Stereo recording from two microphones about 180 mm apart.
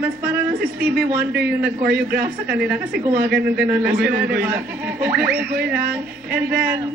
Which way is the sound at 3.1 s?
60° right (ahead or behind).